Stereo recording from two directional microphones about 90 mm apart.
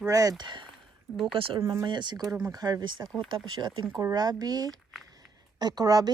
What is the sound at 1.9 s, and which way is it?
Speech, 55° right (ahead or behind).